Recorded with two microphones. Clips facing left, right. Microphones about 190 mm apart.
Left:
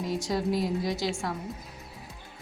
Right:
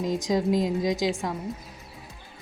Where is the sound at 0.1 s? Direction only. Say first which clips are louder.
Right 4 dB; 20° right (ahead or behind).